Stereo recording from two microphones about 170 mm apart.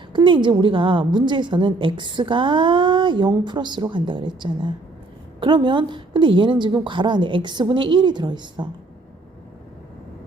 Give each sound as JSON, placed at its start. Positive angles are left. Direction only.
{"t": 0.1, "sound": "a woman's voice", "side_deg": -30}